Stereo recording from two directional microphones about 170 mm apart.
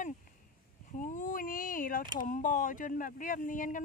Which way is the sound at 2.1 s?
50° left (ahead or behind).